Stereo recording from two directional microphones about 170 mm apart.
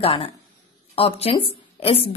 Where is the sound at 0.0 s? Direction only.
35° left (ahead or behind).